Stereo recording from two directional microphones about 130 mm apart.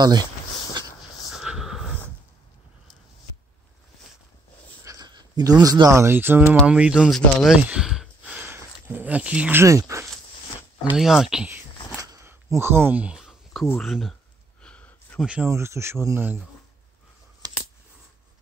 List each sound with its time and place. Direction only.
1.3 s a sound: 5° right (ahead or behind)
4.8 s speech: 30° right (ahead or behind); by 8.5 s 5° right (ahead or behind)
8.5 s speech: 20° right (ahead or behind)
11.0 s speech: 5° right (ahead or behind)
12.3 s a sound: 20° right (ahead or behind); by 13.7 s centre (ahead or behind)
13.7 s speech: centre (ahead or behind)
14.6 s a sound: 10° left (ahead or behind)
15.2 s speech: 10° right (ahead or behind)
15.5 s speech: 20° right (ahead or behind)
17.4 s scissors: 30° right (ahead or behind)